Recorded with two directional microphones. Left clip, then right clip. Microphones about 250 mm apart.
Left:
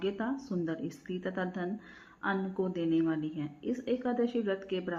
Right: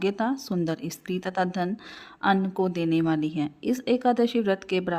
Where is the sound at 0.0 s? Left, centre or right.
Right.